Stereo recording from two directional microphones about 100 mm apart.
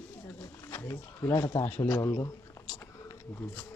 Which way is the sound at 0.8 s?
30° left (ahead or behind).